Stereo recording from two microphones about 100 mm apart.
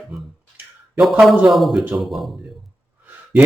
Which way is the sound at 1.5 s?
Centre (ahead or behind).